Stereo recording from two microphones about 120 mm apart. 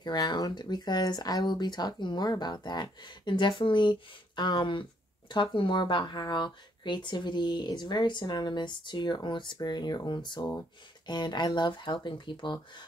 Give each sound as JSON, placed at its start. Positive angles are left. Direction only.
{"t": 0.0, "sound": "speech", "side_deg": 35}